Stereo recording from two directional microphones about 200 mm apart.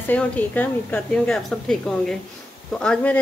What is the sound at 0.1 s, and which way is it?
A woman's voice, 10° left (ahead or behind).